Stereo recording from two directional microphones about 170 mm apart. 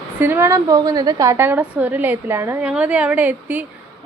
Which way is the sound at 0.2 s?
15° right (ahead or behind).